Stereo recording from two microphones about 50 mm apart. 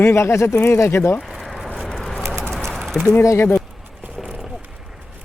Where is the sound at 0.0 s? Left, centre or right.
Left.